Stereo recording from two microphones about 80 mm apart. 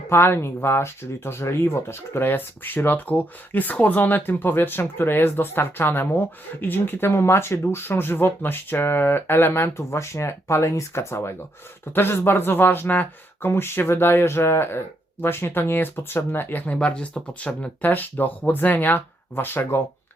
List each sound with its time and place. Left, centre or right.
0.1 s speech: left